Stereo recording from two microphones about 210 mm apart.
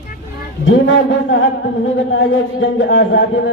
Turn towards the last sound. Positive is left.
turn(degrees=65)  # may be behind; listen again after turning